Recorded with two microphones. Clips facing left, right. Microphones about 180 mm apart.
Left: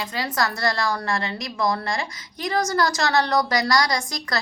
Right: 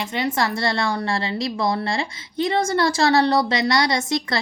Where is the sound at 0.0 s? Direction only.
25° right (ahead or behind).